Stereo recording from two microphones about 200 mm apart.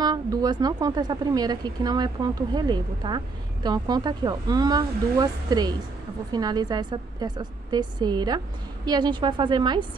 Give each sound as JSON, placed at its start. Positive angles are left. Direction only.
{"t": 0.0, "sound": "speech", "side_deg": -20}